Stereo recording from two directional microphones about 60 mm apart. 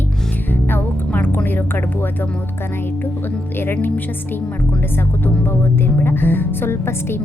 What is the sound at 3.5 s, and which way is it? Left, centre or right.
Speech, left.